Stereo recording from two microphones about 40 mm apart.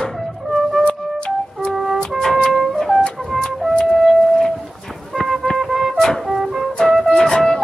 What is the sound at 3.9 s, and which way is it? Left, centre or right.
Music, centre.